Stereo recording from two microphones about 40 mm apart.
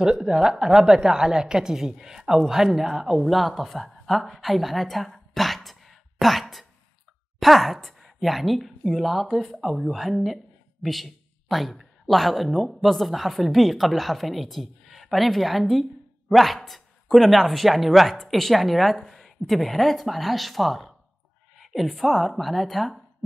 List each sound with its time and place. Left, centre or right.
0.0 s a woman's voice: centre